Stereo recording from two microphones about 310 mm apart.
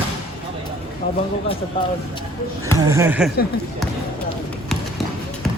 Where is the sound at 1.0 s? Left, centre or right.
Left.